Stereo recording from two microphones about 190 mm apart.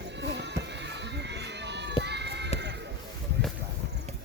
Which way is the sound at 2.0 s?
60° right (ahead or behind).